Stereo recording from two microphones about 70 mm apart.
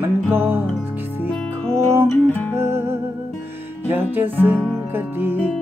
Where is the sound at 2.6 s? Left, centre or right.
Right.